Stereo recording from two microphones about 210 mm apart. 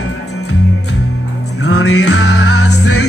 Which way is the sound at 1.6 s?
90° left.